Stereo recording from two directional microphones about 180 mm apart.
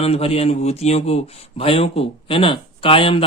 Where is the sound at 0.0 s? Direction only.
35° left (ahead or behind).